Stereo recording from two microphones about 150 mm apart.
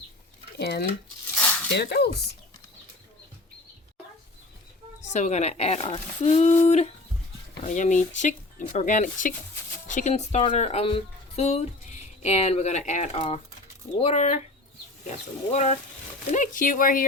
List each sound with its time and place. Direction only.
0.6 s speech: 90° left
1.4 s a sound: 10° left (ahead or behind)
1.8 s speech: 90° left
5.0 s speech: 50° left (ahead or behind)
15.5 s speech: 45° left (ahead or behind)
16.3 s speech: 60° left (ahead or behind)